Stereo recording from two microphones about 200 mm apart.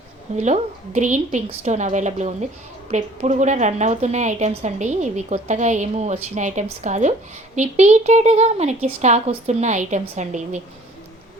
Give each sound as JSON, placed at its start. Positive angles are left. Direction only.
{"t": 0.3, "sound": "a woman's voice", "side_deg": -35}